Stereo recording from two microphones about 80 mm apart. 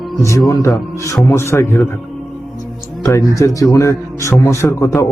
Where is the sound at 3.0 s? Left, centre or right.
Left.